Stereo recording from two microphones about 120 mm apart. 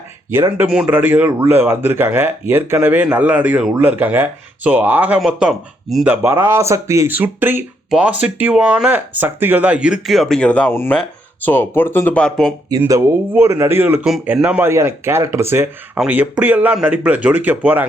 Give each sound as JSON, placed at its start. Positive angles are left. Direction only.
{"t": 0.7, "sound": "speech", "side_deg": -10}
{"t": 6.1, "sound": "speech", "side_deg": -20}
{"t": 12.9, "sound": "speech", "side_deg": -20}
{"t": 14.0, "sound": "speech", "side_deg": -5}
{"t": 14.4, "sound": "speech", "side_deg": -15}